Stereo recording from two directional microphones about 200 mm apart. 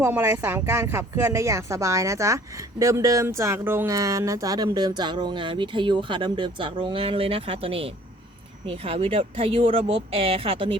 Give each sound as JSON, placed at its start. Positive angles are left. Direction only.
{"t": 0.0, "sound": "speech", "side_deg": -15}